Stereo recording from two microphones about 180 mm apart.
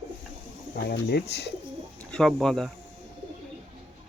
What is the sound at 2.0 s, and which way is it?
Speech, 5° left (ahead or behind).